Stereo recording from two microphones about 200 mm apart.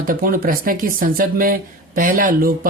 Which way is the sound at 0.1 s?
45° right (ahead or behind).